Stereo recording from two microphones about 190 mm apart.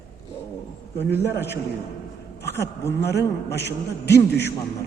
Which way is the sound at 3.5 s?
60° left (ahead or behind).